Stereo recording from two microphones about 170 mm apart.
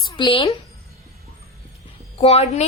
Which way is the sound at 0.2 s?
30° left (ahead or behind).